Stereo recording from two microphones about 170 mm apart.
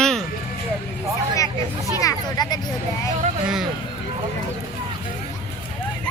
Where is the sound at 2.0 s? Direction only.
20° left (ahead or behind).